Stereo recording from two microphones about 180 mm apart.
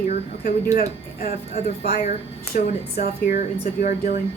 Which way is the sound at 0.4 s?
45° left (ahead or behind).